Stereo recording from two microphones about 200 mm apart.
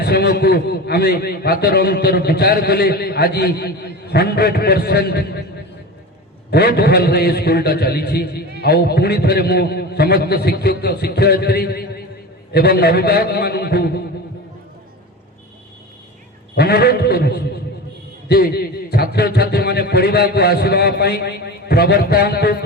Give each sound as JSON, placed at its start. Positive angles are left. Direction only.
{"t": 0.0, "sound": "a man's voice", "side_deg": 55}
{"t": 6.5, "sound": "a man's voice", "side_deg": 55}
{"t": 16.6, "sound": "a man's voice", "side_deg": 55}